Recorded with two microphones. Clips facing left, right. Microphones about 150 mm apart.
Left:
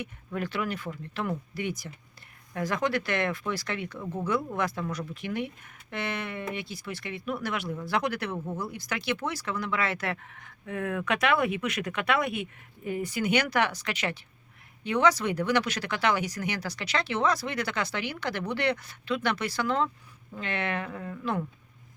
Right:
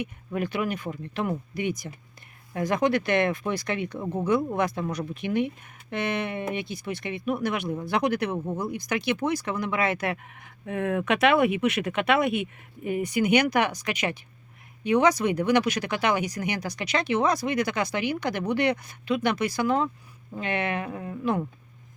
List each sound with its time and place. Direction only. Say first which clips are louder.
0.0 s speech: right 4 dB; 15° right (ahead or behind)